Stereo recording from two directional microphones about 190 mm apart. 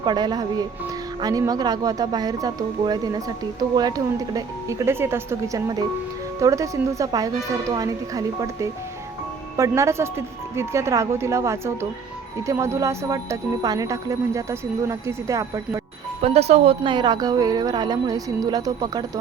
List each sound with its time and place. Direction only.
0.0 s speech: 25° right (ahead or behind)
16.2 s speech: 35° right (ahead or behind)